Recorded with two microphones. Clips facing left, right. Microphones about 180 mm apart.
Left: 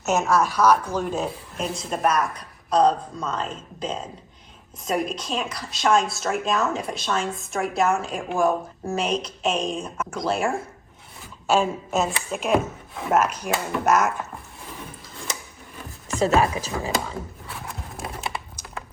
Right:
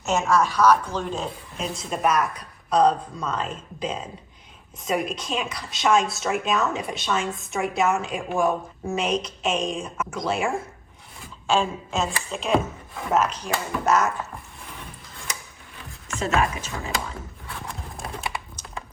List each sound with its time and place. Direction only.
0.0 s a woman's voice: 5° left (ahead or behind)
16.0 s speech: 35° left (ahead or behind)
17.7 s a sound: 5° left (ahead or behind)